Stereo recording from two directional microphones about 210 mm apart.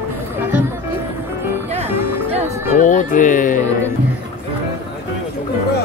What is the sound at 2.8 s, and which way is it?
Speech, 35° left (ahead or behind).